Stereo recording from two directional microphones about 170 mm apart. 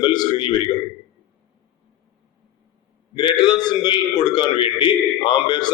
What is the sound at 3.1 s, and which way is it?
A man's voice, 25° left (ahead or behind).